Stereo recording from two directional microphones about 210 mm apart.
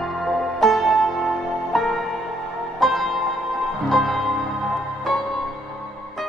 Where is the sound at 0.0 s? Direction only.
Centre (ahead or behind).